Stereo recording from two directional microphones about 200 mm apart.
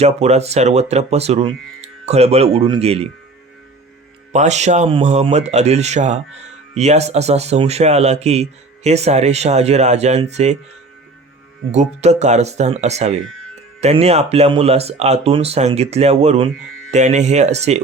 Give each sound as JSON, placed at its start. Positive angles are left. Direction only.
{"t": 0.0, "sound": "speech", "side_deg": -30}
{"t": 4.3, "sound": "speech", "side_deg": -35}
{"t": 11.7, "sound": "speech", "side_deg": -35}